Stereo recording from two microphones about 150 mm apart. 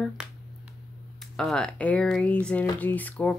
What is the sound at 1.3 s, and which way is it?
Speech, 5° left (ahead or behind).